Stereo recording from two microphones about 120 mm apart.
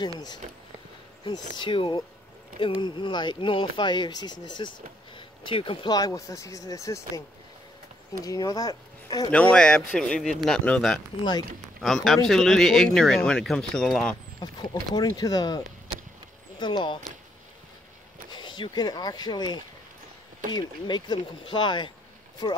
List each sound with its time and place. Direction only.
0.4 s a sound: 60° right (ahead or behind)
1.2 s speech: 40° left (ahead or behind)
5.1 s a sound: 45° left (ahead or behind)
5.9 s speech: 30° left (ahead or behind)
9.3 s speech: 10° left (ahead or behind)
14.4 s speech: 35° left (ahead or behind)
18.3 s speech: 40° left (ahead or behind)